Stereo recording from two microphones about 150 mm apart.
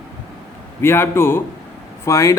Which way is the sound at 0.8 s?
15° left (ahead or behind).